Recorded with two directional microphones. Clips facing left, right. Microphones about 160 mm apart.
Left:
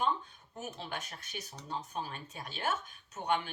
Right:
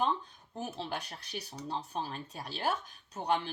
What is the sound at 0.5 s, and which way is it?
Speech, 30° right (ahead or behind).